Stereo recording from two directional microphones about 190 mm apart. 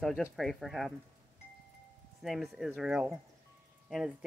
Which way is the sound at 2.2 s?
Centre (ahead or behind).